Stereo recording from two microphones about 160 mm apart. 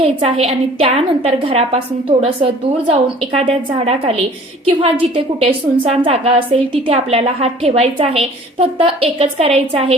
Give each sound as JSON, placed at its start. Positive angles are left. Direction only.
{"t": 0.0, "sound": "a woman's voice", "side_deg": -40}